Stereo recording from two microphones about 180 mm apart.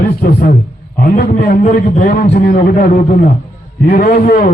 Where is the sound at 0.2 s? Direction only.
60° left (ahead or behind).